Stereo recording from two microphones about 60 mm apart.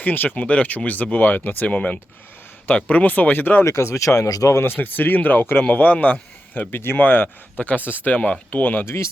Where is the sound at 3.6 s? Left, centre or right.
Left.